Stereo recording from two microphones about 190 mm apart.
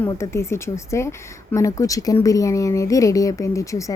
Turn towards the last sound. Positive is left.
turn(degrees=15)  # may be behind; listen again after turning